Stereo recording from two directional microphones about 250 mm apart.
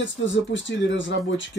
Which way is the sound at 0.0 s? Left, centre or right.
Left.